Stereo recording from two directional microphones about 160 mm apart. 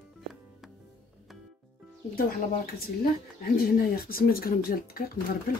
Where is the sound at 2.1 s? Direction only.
65° left (ahead or behind).